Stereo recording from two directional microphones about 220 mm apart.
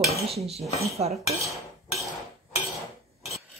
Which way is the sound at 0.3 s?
30° right (ahead or behind).